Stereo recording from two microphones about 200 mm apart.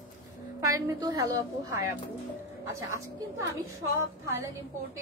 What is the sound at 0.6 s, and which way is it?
A woman's voice, 15° right (ahead or behind).